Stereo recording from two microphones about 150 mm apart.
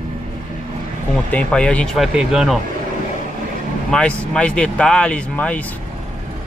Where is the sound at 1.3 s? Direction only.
5° left (ahead or behind).